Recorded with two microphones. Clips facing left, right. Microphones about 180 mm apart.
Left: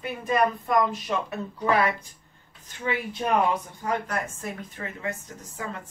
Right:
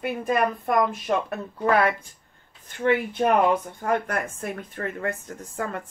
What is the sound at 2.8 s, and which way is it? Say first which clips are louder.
Speech: right 7 dB; 55° right (ahead or behind).